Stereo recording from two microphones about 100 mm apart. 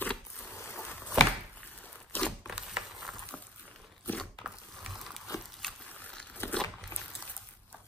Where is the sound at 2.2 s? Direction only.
5° right (ahead or behind).